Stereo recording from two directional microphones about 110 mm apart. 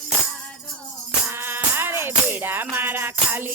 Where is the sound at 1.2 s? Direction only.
20° right (ahead or behind).